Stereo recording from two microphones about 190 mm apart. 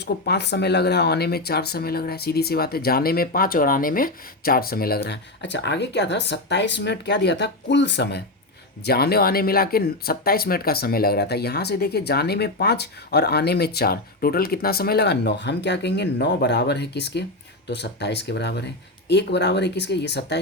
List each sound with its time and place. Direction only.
0.0 s speech: 60° left (ahead or behind)